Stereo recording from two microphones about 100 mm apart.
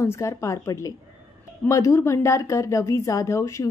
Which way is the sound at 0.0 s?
30° left (ahead or behind).